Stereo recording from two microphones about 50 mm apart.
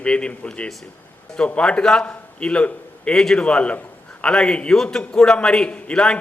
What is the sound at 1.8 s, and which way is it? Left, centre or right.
Speech, centre.